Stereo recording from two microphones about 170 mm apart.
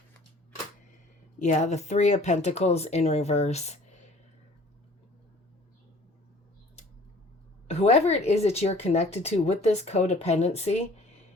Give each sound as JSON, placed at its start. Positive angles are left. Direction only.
{"t": 1.4, "sound": "speech", "side_deg": 45}
{"t": 7.7, "sound": "speech", "side_deg": 40}